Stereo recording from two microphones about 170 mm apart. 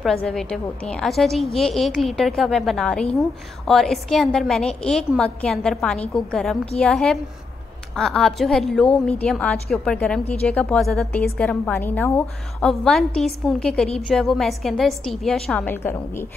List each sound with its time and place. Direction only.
0.0 s a woman's voice: centre (ahead or behind)